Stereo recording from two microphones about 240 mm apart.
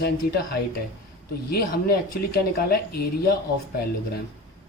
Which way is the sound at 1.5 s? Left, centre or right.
Left.